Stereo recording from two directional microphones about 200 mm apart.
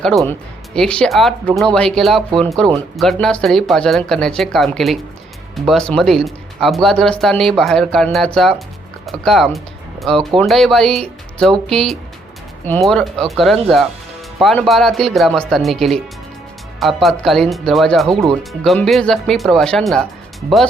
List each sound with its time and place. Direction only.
0.0 s speech: centre (ahead or behind)